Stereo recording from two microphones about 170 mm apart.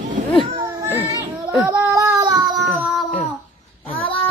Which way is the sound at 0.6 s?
15° right (ahead or behind).